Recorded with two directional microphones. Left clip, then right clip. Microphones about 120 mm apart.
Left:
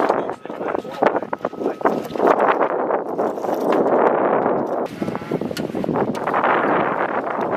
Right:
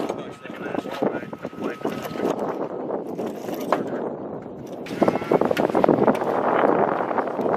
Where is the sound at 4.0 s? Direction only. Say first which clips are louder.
Left 14 dB; 35° left (ahead or behind).